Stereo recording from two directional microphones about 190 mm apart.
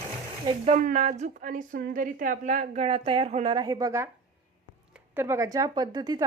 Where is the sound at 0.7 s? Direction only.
40° right (ahead or behind).